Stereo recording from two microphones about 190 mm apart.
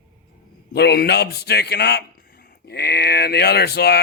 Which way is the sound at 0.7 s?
60° left (ahead or behind).